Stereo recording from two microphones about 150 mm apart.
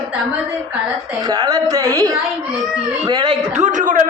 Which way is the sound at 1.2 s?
25° right (ahead or behind).